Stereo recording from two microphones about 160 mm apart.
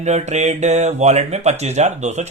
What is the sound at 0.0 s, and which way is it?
Speech, 45° right (ahead or behind).